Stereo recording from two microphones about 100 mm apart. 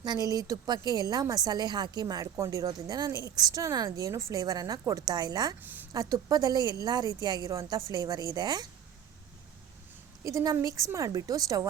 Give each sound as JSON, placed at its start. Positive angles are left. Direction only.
{"t": 0.0, "sound": "speech", "side_deg": -40}
{"t": 10.2, "sound": "speech", "side_deg": -30}